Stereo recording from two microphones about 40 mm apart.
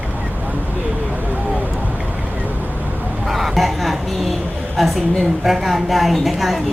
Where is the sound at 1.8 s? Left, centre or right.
Right.